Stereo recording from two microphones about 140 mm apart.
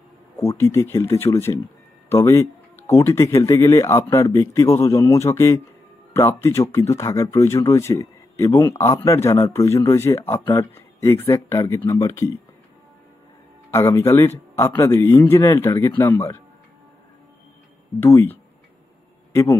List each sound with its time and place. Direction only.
0.4 s a man's voice: 20° left (ahead or behind)
13.7 s a man's voice: 20° left (ahead or behind)
18.0 s a man's voice: 15° left (ahead or behind)